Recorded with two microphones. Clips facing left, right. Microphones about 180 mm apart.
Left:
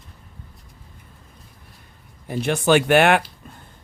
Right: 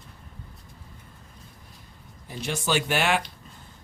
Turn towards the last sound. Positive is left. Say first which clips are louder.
# left 9 dB
turn(degrees=60)  # may be behind; listen again after turning